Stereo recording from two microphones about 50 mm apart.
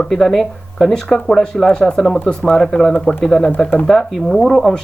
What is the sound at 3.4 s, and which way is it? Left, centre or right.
Speech, left.